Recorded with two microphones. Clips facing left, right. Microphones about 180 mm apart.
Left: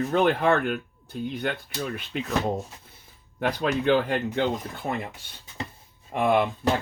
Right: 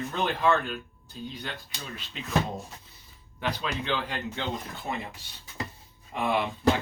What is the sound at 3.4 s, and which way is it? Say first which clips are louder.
Speech: left 6 dB; 50° left (ahead or behind).